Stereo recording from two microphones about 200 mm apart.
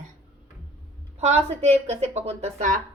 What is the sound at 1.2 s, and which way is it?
A woman's voice, 30° right (ahead or behind).